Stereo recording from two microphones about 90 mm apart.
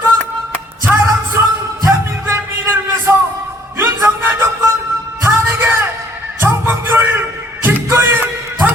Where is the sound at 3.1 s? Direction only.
25° right (ahead or behind).